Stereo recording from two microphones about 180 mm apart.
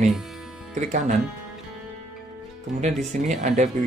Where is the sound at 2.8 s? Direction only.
40° right (ahead or behind).